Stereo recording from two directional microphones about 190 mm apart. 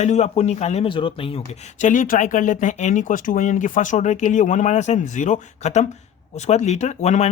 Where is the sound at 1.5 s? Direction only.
40° left (ahead or behind).